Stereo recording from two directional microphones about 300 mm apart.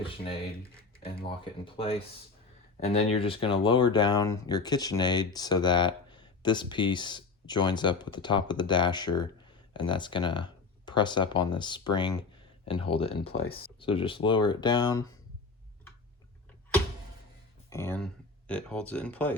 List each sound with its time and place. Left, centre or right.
1.6 s speech: centre
17.7 s speech: centre